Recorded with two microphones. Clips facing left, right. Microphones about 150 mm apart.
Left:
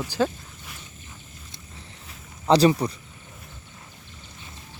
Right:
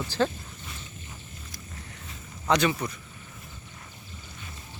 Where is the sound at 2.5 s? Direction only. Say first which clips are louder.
Left 6 dB; 35° left (ahead or behind).